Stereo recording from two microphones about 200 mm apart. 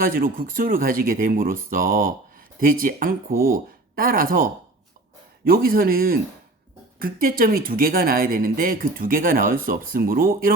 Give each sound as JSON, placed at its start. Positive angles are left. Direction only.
{"t": 0.0, "sound": "speech", "side_deg": -45}